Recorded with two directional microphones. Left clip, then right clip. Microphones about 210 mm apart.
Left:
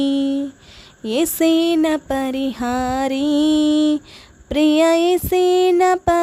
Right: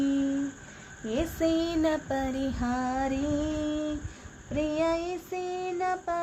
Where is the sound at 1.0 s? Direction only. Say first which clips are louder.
Left 11 dB; 60° left (ahead or behind).